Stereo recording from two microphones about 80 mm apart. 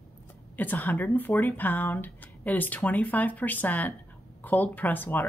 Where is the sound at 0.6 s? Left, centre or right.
Left.